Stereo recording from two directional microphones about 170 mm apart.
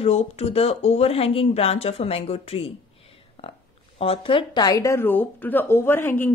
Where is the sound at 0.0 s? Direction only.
35° left (ahead or behind).